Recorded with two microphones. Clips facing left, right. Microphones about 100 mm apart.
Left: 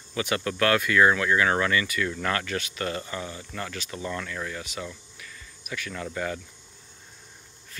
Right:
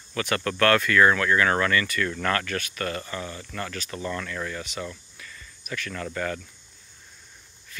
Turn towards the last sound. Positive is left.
turn(degrees=15)  # may be behind; listen again after turning